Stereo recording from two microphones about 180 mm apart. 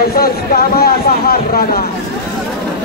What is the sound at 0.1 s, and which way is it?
Speech, 55° left (ahead or behind).